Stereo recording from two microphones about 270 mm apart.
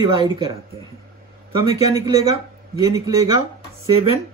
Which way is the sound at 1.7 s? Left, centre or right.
Centre.